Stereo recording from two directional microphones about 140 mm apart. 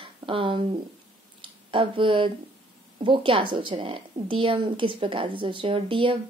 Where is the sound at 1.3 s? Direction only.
35° right (ahead or behind).